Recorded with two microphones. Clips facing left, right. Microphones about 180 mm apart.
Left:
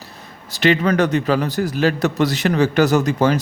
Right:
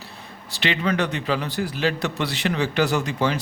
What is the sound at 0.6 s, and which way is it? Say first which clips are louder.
A man's voice: left 7 dB; 45° left (ahead or behind).